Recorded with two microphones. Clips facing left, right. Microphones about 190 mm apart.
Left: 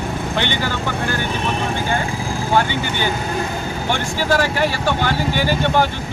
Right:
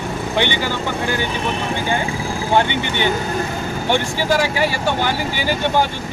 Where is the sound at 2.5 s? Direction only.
20° right (ahead or behind).